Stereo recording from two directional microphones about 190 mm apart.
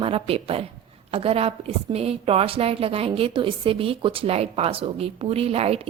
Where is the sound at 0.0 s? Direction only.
30° right (ahead or behind).